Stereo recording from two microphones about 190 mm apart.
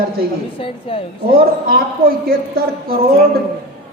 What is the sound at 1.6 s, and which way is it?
Speech, 50° right (ahead or behind).